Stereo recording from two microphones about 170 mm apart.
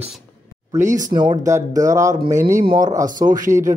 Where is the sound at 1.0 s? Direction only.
25° right (ahead or behind).